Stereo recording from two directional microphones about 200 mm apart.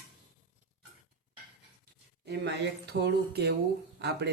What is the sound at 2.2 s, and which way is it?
Speech, 55° right (ahead or behind).